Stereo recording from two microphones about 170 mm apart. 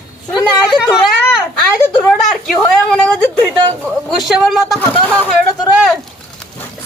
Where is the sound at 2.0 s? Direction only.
5° left (ahead or behind).